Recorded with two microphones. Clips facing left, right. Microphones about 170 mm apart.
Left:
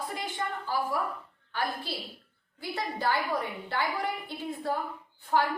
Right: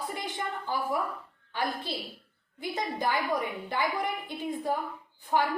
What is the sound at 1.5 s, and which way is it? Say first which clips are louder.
A woman's voice: right 1 dB; 20° right (ahead or behind).